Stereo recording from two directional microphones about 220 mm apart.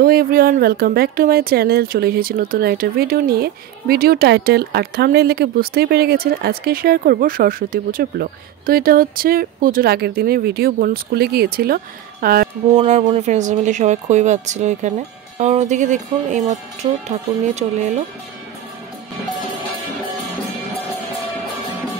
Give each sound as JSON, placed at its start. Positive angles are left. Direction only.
{"t": 0.0, "sound": "speech", "side_deg": -40}
{"t": 12.8, "sound": "speech", "side_deg": -30}